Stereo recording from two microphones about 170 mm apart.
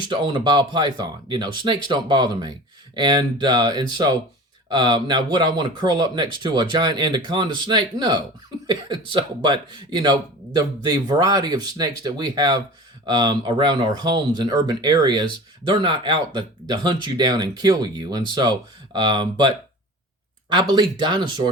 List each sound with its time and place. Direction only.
0.1 s speech: 30° right (ahead or behind)